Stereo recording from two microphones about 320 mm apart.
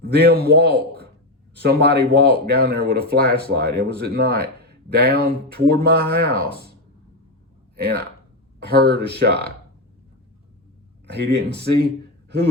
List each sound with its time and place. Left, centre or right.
0.0 s a man's voice: right
7.8 s speech: right
11.0 s speech: right